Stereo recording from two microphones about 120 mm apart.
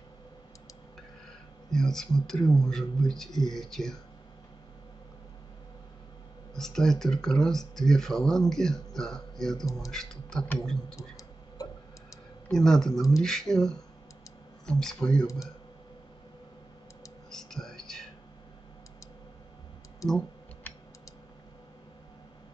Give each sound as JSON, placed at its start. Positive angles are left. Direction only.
{"t": 1.7, "sound": "speech", "side_deg": 5}
{"t": 6.5, "sound": "speech", "side_deg": 5}
{"t": 11.0, "sound": "tick", "side_deg": 30}
{"t": 12.4, "sound": "speech", "side_deg": 5}
{"t": 17.3, "sound": "whispering", "side_deg": 5}
{"t": 20.1, "sound": "computer keyboard", "side_deg": 10}